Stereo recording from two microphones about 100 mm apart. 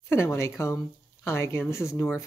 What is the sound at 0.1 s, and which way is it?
Speech, 25° left (ahead or behind).